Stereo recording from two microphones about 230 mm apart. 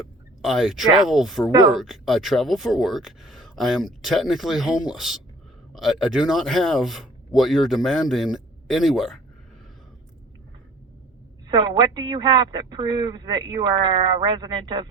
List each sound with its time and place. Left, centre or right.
0.4 s speech: centre
1.5 s a man's voice: centre
1.7 s speech: centre
11.4 s a man's voice: centre